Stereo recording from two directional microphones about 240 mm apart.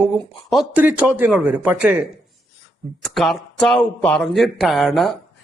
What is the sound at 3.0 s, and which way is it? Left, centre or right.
Speech, centre.